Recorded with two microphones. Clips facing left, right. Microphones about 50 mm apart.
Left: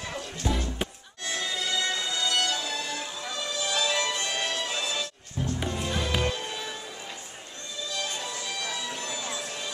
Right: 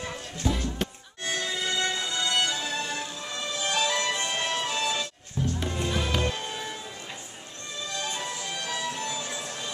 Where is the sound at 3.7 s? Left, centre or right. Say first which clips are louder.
Right 1 dB; right.